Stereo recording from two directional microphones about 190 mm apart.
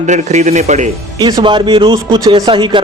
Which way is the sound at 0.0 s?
40° right (ahead or behind).